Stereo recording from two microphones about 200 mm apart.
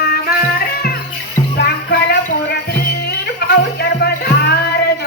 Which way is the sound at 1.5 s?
55° left (ahead or behind).